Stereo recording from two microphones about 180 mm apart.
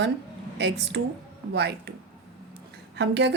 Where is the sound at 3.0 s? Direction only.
80° right.